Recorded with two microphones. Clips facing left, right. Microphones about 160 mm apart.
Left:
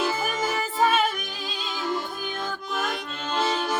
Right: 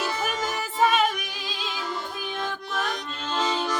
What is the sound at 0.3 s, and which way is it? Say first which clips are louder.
Music: left 2 dB; centre (ahead or behind).